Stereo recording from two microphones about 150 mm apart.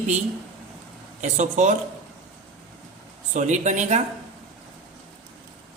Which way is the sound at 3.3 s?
55° right (ahead or behind).